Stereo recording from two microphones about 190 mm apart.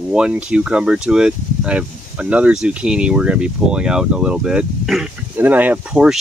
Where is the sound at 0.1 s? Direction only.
5° right (ahead or behind).